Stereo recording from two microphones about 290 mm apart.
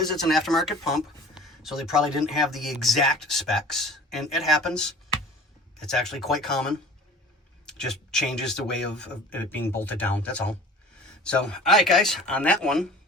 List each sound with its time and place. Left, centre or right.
0.3 s speech: centre